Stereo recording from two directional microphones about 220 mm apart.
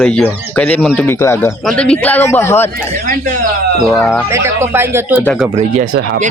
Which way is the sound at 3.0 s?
40° right (ahead or behind).